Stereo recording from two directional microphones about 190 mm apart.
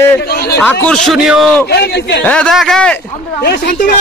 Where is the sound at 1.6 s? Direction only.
60° left (ahead or behind).